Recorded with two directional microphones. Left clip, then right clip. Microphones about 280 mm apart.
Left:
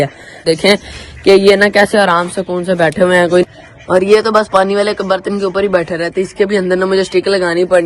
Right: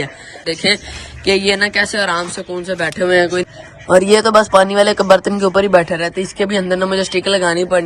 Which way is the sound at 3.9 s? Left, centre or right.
Centre.